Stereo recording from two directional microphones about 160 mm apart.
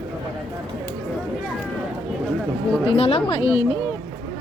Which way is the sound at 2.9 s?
35° left (ahead or behind).